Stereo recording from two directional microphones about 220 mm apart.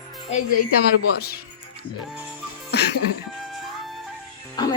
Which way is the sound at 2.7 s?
50° left (ahead or behind).